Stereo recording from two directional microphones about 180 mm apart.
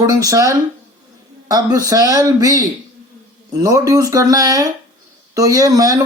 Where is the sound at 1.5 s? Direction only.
20° right (ahead or behind).